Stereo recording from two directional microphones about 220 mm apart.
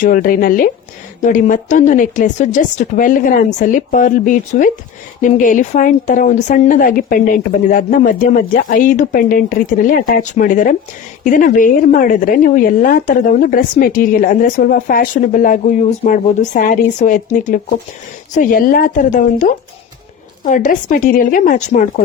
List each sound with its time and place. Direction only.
0.0 s a woman's voice: 40° left (ahead or behind)